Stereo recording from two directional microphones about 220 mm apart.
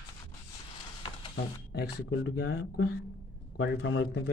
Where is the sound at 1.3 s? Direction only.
45° left (ahead or behind).